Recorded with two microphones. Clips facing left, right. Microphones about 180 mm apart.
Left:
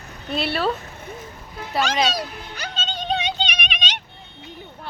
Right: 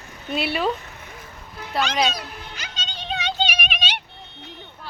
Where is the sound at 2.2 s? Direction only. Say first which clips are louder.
Left 5 dB; 35° left (ahead or behind).